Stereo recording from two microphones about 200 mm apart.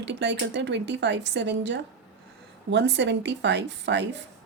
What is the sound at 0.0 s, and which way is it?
A woman's voice, 60° right (ahead or behind).